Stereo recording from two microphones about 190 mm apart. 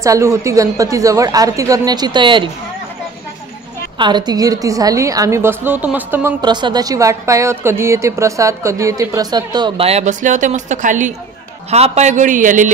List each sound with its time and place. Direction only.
0.0 s a woman's voice: 15° right (ahead or behind)
4.0 s a woman's voice: 20° right (ahead or behind)
6.4 s a woman's voice: 25° right (ahead or behind); by 12.6 s 40° right (ahead or behind)